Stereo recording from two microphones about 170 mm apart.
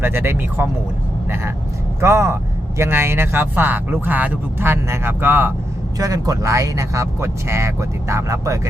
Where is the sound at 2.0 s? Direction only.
15° right (ahead or behind).